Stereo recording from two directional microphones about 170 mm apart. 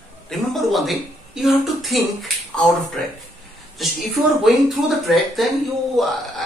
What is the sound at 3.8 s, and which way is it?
Speech, centre (ahead or behind).